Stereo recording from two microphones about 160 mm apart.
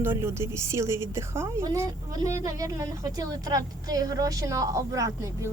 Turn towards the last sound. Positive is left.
turn(degrees=-20)  # may be behind; listen again after turning